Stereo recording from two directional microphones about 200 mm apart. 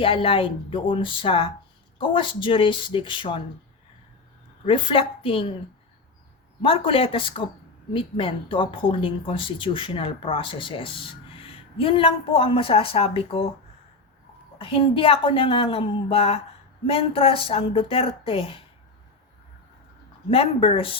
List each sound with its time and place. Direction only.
0.0 s a woman's voice: 25° left (ahead or behind)
4.6 s a woman's voice: 25° left (ahead or behind)
6.6 s a woman's voice: 25° left (ahead or behind)
14.6 s a woman's voice: 25° left (ahead or behind)
20.3 s a woman's voice: 30° left (ahead or behind)